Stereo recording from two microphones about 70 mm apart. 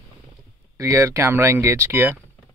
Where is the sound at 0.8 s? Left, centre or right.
Right.